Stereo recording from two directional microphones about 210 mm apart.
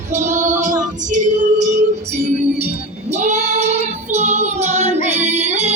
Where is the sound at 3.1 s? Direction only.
30° right (ahead or behind).